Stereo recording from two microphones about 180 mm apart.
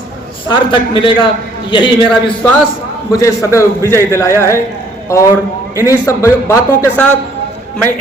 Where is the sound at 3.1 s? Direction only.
15° left (ahead or behind).